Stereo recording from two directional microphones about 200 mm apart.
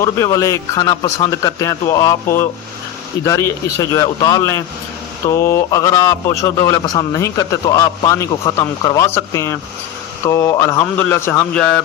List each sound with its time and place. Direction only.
0.0 s a man's voice: 15° left (ahead or behind)